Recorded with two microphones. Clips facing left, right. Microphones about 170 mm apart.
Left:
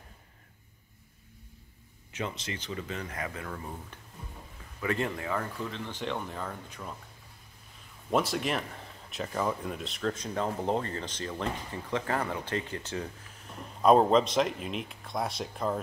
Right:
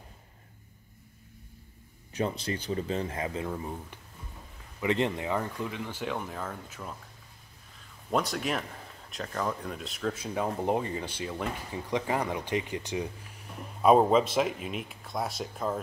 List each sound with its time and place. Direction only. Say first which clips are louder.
2.1 s speech: right 5 dB; 35° right (ahead or behind); by 3.7 s 20° right (ahead or behind)
4.7 s speech: right 3 dB; 20° right (ahead or behind); by 7.0 s centre (ahead or behind)
8.1 s speech: left 1 dB; centre (ahead or behind)